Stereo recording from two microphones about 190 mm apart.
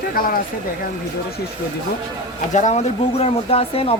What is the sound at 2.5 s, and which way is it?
Speech, 40° left (ahead or behind).